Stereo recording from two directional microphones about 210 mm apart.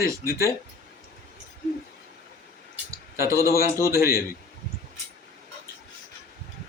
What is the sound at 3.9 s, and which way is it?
Speech, 15° right (ahead or behind).